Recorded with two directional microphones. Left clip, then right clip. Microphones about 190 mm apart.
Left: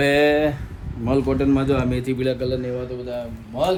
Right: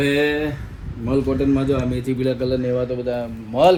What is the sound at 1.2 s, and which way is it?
Speech, 5° left (ahead or behind).